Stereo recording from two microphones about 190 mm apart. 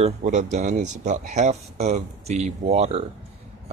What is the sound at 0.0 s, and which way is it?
Speech, 35° right (ahead or behind).